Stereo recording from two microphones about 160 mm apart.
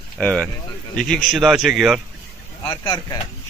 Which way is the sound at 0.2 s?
5° left (ahead or behind).